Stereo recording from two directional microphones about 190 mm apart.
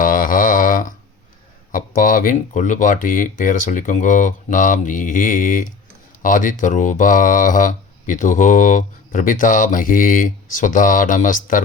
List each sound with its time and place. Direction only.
0.0 s mantra: 45° left (ahead or behind)
2.0 s speech: 45° left (ahead or behind)